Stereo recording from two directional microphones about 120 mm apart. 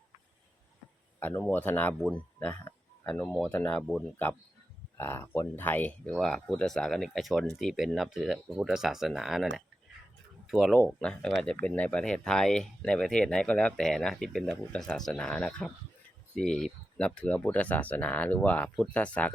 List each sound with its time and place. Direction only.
1.2 s speech: 10° left (ahead or behind)
4.9 s speech: 20° left (ahead or behind)
6.1 s speech: 5° left (ahead or behind)
10.8 s speech: 5° left (ahead or behind)